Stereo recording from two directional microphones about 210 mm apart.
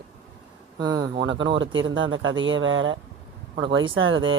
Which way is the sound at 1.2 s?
60° right (ahead or behind).